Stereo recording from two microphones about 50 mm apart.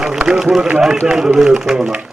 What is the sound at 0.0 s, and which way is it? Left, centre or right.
A man's voice, centre.